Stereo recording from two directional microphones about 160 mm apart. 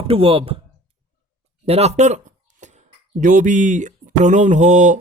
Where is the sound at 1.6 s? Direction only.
40° right (ahead or behind).